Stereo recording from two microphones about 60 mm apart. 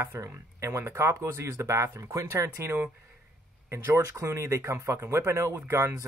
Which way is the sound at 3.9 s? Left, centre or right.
Right.